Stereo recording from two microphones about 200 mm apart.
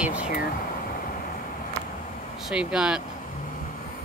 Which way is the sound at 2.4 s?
5° right (ahead or behind).